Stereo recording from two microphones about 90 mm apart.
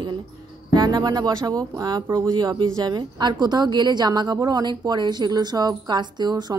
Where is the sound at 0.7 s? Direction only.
50° right (ahead or behind).